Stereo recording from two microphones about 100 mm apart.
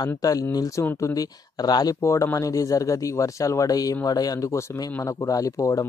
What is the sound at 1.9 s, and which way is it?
Speech, 30° left (ahead or behind).